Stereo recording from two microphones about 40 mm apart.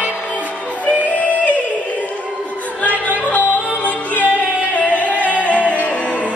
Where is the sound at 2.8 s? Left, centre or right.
Left.